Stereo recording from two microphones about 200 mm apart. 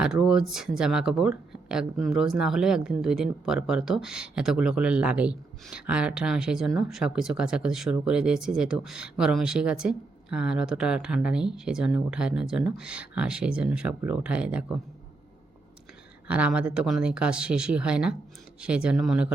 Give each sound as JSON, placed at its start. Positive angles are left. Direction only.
{"t": 0.0, "sound": "speech", "side_deg": -5}
{"t": 16.2, "sound": "speech", "side_deg": -5}